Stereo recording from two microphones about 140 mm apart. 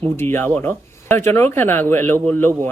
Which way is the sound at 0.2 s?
15° left (ahead or behind).